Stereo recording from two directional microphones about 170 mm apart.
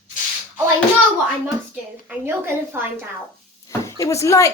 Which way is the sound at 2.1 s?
15° right (ahead or behind).